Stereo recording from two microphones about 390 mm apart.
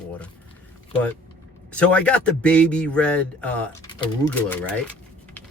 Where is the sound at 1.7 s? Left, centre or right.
Centre.